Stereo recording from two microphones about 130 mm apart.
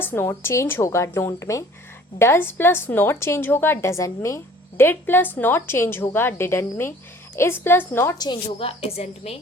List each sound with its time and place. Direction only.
0.0 s a woman's voice: 20° left (ahead or behind)
8.2 s a woman's voice: 40° left (ahead or behind)